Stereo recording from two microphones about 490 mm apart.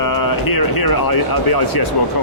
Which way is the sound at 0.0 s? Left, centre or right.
Left.